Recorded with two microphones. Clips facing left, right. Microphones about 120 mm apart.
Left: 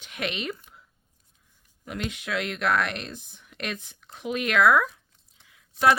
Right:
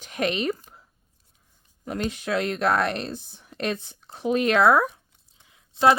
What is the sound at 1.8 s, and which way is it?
Speech, 35° right (ahead or behind).